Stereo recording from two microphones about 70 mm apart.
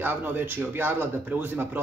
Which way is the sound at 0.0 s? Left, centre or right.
Right.